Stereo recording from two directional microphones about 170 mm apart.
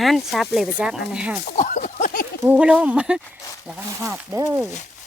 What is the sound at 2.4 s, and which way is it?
Speech, 10° right (ahead or behind).